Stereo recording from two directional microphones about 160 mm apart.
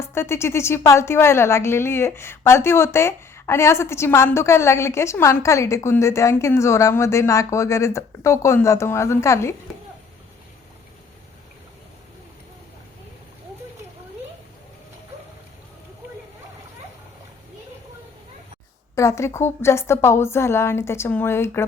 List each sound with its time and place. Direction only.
0.0 s a woman's voice: 15° left (ahead or behind)
18.9 s a woman's voice: 15° left (ahead or behind)